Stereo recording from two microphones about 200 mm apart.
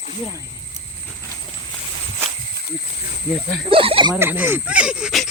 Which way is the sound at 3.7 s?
25° right (ahead or behind).